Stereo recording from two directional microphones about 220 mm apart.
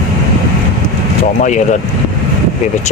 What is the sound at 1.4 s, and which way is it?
Speech, 35° left (ahead or behind).